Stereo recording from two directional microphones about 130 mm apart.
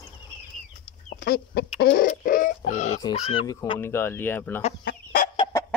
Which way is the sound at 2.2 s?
90° left.